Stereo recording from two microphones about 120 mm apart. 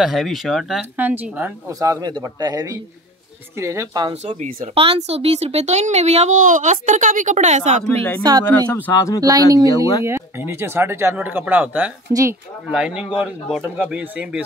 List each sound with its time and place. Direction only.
0.0 s speech: centre (ahead or behind)
0.9 s speech: 15° right (ahead or behind)
1.7 s a man's voice: 30° right (ahead or behind)
4.4 s speech: 50° right (ahead or behind); by 7.8 s 75° right (ahead or behind)
7.9 s speech: 15° left (ahead or behind)
8.2 s a man's voice: 35° right (ahead or behind)
8.5 s speech: 15° left (ahead or behind)
9.2 s a man's voice: 30° right (ahead or behind); by 11.9 s 15° right (ahead or behind)
12.1 s speech: 30° right (ahead or behind)
12.6 s speech: 10° right (ahead or behind)